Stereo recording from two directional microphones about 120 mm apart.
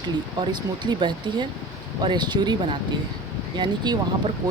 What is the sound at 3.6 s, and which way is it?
Speech, 35° right (ahead or behind).